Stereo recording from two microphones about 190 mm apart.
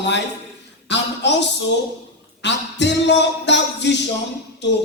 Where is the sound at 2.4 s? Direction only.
65° left (ahead or behind).